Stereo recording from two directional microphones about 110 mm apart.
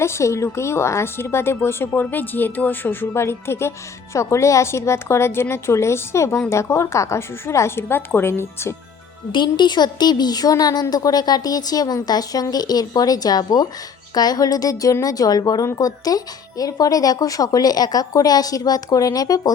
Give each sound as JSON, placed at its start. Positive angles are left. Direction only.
{"t": 0.0, "sound": "a woman's voice", "side_deg": 25}
{"t": 9.3, "sound": "speech", "side_deg": 45}